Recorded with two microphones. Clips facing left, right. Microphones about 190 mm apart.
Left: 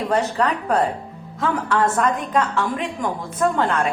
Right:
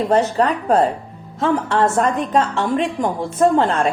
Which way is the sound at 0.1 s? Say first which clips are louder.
Right 3 dB; 30° right (ahead or behind).